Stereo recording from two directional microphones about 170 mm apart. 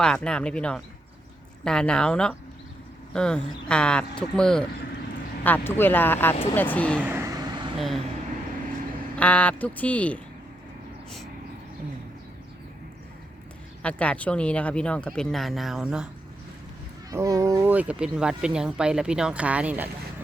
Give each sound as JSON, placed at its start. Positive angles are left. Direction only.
{"t": 0.0, "sound": "speech", "side_deg": 5}
{"t": 7.0, "sound": "vehicle", "side_deg": -15}
{"t": 7.8, "sound": "speech", "side_deg": 0}
{"t": 9.1, "sound": "speech", "side_deg": 5}
{"t": 13.8, "sound": "speech", "side_deg": 5}
{"t": 17.1, "sound": "speech", "side_deg": -20}